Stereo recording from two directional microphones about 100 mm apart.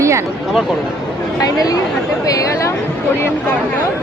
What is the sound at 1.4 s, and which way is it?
Speech, 40° left (ahead or behind).